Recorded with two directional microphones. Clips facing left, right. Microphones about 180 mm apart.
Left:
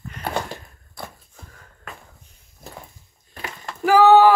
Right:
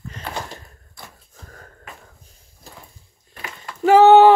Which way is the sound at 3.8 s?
25° right (ahead or behind).